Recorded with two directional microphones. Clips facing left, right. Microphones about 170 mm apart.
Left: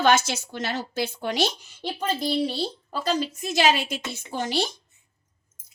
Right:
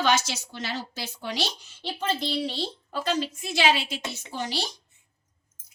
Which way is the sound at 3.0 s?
45° left (ahead or behind).